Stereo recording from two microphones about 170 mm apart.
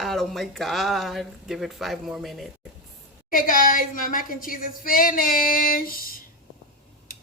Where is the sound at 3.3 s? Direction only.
55° left (ahead or behind).